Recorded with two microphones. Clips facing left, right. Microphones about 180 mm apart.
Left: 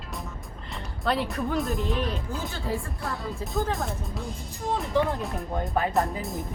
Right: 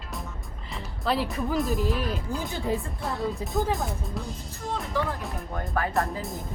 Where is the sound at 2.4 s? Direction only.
15° right (ahead or behind).